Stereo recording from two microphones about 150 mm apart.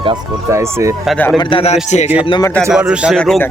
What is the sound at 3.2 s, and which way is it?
Speech, 5° left (ahead or behind).